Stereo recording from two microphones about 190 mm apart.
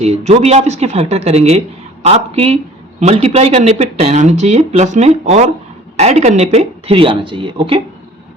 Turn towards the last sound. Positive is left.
turn(degrees=-25)  # may be behind; listen again after turning